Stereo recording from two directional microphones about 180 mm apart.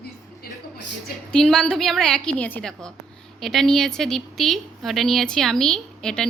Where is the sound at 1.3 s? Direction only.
5° left (ahead or behind).